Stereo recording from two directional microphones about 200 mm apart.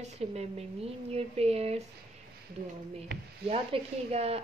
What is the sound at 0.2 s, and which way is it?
Speech, 30° right (ahead or behind).